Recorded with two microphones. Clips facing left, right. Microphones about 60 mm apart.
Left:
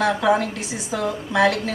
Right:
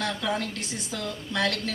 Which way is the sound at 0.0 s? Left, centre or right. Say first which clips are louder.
Left 10 dB; left.